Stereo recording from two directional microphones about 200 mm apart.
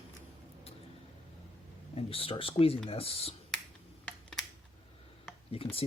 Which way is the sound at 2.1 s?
30° left (ahead or behind).